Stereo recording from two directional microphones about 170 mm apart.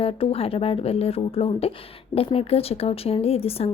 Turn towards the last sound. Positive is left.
turn(degrees=35)  # may be behind; listen again after turning